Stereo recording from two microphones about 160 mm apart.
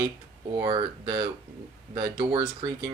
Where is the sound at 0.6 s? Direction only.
30° right (ahead or behind).